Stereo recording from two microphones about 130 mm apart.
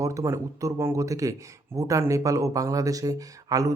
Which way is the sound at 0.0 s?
25° right (ahead or behind).